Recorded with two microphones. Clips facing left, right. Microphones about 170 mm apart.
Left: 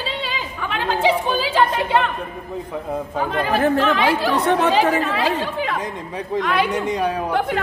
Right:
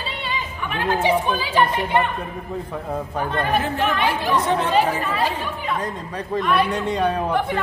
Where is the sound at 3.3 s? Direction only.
90° left.